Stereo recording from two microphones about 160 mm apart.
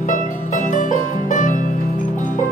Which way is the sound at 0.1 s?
55° left (ahead or behind).